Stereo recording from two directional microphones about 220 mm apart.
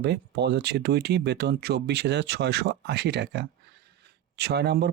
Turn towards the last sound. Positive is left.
turn(degrees=-50)  # may be behind; listen again after turning